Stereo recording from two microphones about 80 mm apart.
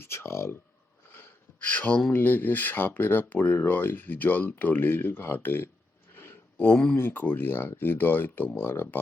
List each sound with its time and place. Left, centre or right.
0.0 s speech: left
1.1 s gasp: left
2.1 s speech: left
6.1 s a sound: left
6.9 s speech: left